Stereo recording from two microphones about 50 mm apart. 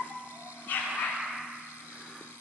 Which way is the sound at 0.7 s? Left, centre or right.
Left.